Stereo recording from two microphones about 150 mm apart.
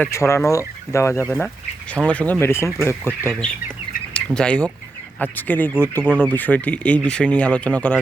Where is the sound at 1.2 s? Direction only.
10° left (ahead or behind).